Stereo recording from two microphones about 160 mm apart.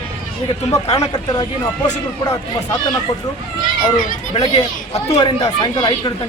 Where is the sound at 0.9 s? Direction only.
20° left (ahead or behind).